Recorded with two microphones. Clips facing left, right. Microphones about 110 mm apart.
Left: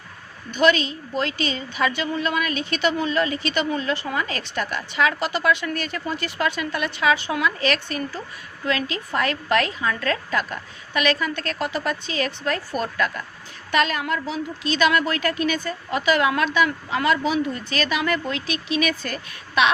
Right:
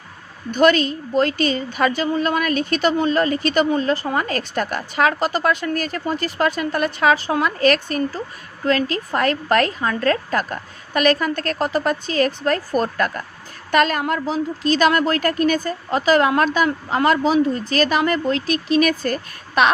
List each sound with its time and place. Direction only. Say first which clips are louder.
0.5 s a woman's voice: right 4 dB; 45° right (ahead or behind)